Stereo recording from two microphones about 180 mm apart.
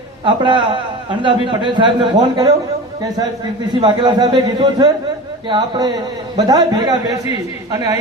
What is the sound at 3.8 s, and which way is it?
A man's voice, 25° right (ahead or behind).